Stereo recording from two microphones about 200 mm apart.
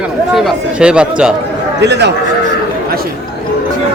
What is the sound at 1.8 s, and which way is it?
Speech, 60° right (ahead or behind).